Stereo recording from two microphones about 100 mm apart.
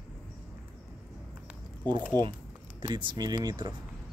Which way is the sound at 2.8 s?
50° right (ahead or behind).